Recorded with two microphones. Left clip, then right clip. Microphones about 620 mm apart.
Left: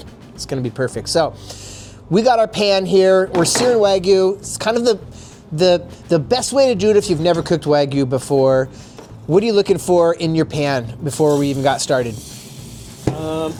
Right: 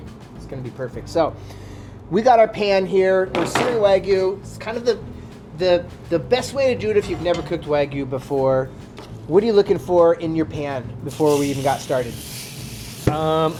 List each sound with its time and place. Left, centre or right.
0.8 s speech: left
2.1 s speech: left
5.5 s speech: left
13.1 s speech: right